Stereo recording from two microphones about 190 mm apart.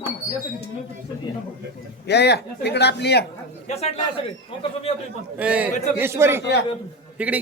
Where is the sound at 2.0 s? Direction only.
60° left (ahead or behind).